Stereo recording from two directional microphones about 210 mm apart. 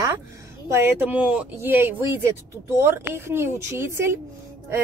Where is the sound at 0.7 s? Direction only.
10° right (ahead or behind).